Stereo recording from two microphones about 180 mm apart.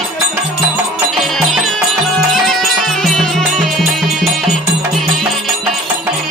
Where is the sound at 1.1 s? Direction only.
Centre (ahead or behind).